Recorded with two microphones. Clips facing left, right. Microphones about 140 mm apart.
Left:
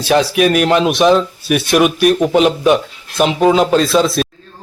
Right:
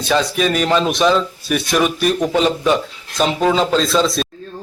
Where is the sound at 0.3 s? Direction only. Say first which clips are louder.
Left 5 dB; 65° left (ahead or behind).